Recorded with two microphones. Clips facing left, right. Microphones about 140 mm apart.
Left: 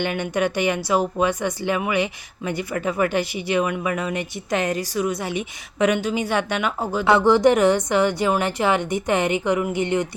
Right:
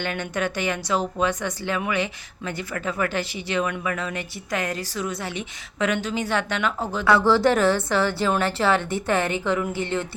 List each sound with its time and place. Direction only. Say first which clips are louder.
0.0 s a woman's voice: left 4 dB; 15° left (ahead or behind)
7.0 s a woman's voice: left 3 dB; 20° left (ahead or behind)